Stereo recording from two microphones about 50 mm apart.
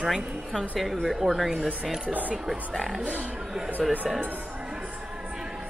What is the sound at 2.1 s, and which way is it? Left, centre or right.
Speech, right.